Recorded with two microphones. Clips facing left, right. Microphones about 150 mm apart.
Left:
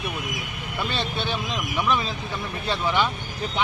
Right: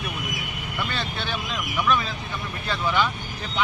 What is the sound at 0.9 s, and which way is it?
Speech, 20° left (ahead or behind).